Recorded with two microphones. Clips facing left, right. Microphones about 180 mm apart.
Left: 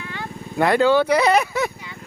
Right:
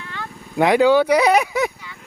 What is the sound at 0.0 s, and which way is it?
Vehicle, 15° left (ahead or behind).